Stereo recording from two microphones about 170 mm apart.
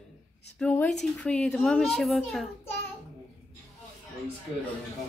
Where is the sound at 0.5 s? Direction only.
10° left (ahead or behind).